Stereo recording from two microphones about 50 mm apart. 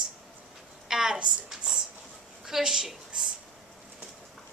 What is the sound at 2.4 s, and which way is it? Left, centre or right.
Speech, centre.